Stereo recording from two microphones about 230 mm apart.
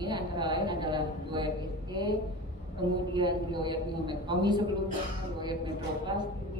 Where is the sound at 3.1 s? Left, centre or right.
Centre.